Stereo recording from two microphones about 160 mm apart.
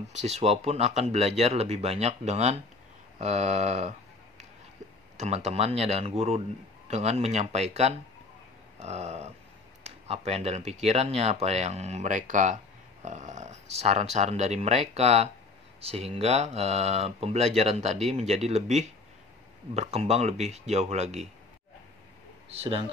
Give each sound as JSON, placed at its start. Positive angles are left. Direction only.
{"t": 0.2, "sound": "speech", "side_deg": -40}
{"t": 5.1, "sound": "speech", "side_deg": -45}
{"t": 22.5, "sound": "speech", "side_deg": -35}